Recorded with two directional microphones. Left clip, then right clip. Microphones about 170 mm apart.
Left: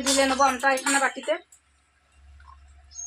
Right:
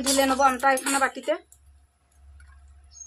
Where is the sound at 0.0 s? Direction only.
30° right (ahead or behind).